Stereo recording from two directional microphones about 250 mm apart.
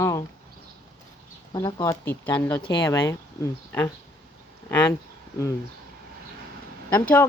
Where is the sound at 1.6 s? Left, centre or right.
Centre.